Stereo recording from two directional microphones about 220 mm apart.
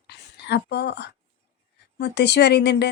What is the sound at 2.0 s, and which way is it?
Speech, 50° left (ahead or behind).